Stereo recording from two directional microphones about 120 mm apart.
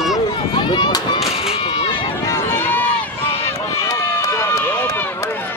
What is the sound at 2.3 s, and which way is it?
Run, 20° left (ahead or behind).